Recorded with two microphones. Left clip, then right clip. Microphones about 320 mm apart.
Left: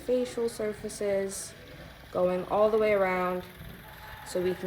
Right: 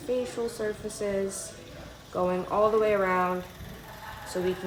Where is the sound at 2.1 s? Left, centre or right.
Left.